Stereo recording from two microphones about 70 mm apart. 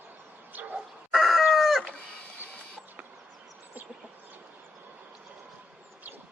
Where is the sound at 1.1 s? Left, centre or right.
Centre.